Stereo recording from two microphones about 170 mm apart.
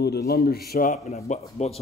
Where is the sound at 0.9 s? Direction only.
40° left (ahead or behind).